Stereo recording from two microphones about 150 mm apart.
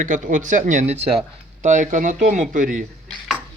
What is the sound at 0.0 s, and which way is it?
Speech, 55° right (ahead or behind).